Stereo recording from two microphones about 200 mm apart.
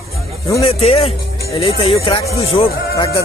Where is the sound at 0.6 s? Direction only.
30° left (ahead or behind).